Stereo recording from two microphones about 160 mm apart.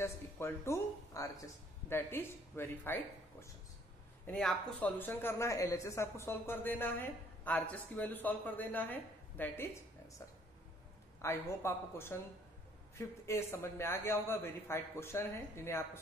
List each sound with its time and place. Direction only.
0.0 s speech: 15° left (ahead or behind)
4.3 s speech: 5° left (ahead or behind)
11.1 s speech: 15° left (ahead or behind)